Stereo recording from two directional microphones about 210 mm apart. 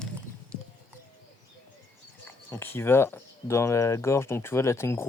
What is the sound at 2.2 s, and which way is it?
Speech, 10° left (ahead or behind).